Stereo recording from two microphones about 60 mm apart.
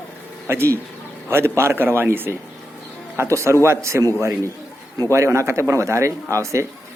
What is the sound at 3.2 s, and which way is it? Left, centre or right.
Speech, right.